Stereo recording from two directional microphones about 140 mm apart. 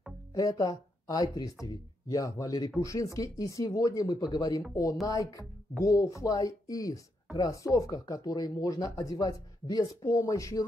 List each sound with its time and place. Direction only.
0.3 s speech: 25° left (ahead or behind)